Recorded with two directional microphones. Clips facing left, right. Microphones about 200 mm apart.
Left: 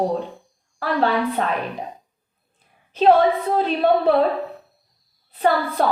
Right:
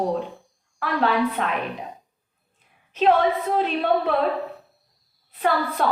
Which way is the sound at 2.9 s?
35° left (ahead or behind).